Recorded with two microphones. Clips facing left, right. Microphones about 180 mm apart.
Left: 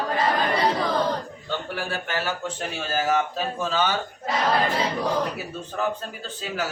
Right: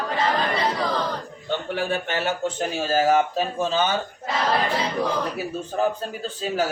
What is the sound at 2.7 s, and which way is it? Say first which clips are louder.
Speech: right 4 dB; 30° right (ahead or behind).